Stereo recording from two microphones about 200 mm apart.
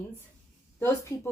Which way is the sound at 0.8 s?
10° left (ahead or behind).